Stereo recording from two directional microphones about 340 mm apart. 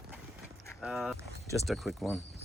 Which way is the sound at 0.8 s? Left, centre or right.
Centre.